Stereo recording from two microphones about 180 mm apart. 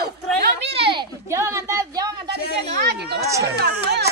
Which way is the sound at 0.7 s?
30° right (ahead or behind).